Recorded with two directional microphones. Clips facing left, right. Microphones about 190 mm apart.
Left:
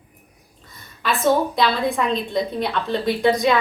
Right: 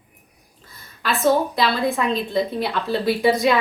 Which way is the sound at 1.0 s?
Centre (ahead or behind).